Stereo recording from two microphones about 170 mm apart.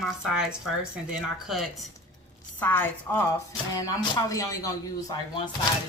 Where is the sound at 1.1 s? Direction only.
Centre (ahead or behind).